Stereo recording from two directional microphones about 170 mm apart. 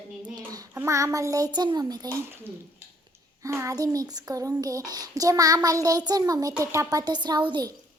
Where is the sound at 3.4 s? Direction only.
15° right (ahead or behind).